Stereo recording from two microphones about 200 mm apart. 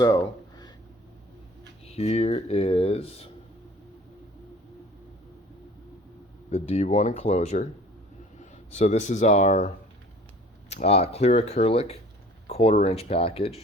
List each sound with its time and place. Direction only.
0.0 s a sound: 15° left (ahead or behind)
1.9 s speech: 30° left (ahead or behind)
6.5 s speech: 30° left (ahead or behind)
8.7 s speech: 35° left (ahead or behind)